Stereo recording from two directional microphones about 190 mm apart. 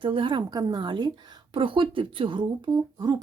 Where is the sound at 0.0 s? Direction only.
25° right (ahead or behind).